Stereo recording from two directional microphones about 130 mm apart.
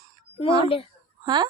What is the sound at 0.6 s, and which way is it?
Speech, 45° left (ahead or behind).